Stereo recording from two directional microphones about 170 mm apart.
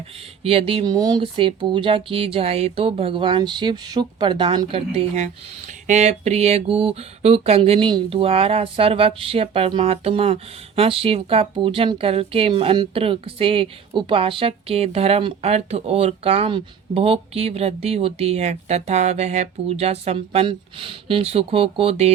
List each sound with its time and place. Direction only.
0.4 s speech: 35° right (ahead or behind)
4.7 s speech: 40° right (ahead or behind)